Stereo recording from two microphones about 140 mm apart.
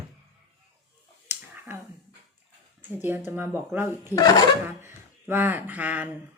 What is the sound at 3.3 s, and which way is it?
Speech, 15° right (ahead or behind).